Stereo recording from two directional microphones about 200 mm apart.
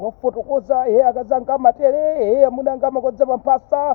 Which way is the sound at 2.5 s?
25° right (ahead or behind).